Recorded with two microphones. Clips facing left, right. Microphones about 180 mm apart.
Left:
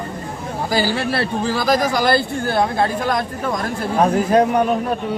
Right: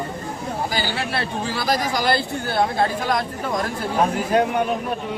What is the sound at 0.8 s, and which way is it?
Speech, 45° left (ahead or behind).